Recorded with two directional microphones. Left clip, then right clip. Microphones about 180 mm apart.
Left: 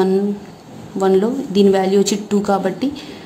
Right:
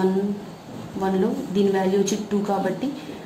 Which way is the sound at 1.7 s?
50° left (ahead or behind).